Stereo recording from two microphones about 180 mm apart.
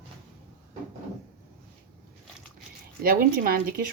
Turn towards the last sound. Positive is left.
turn(degrees=-55)  # may be behind; listen again after turning